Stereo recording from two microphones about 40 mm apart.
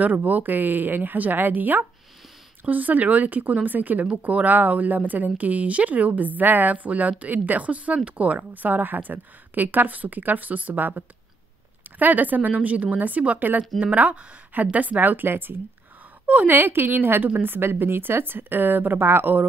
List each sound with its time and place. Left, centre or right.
0.0 s a woman's voice: right
13.7 s a woman's voice: right
15.2 s a woman's voice: right
16.3 s a woman's voice: right
16.5 s a woman's voice: right